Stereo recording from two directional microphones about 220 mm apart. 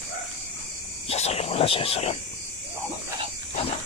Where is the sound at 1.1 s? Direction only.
30° left (ahead or behind).